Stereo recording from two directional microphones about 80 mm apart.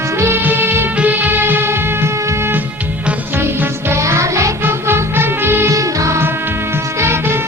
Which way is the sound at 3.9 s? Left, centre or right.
Right.